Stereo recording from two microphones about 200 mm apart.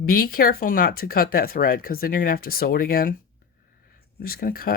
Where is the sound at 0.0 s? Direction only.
45° left (ahead or behind).